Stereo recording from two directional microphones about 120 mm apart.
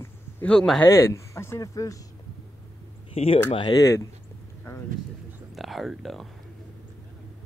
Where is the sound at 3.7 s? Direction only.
25° left (ahead or behind).